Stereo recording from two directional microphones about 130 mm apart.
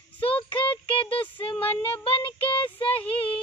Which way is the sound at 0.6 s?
45° left (ahead or behind).